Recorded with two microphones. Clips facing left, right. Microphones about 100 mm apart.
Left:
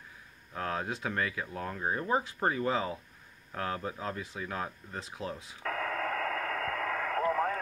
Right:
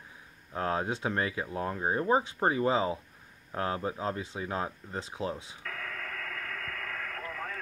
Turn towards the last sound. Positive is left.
turn(degrees=35)  # may be behind; listen again after turning